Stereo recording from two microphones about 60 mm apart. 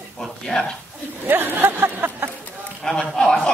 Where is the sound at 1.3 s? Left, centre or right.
Right.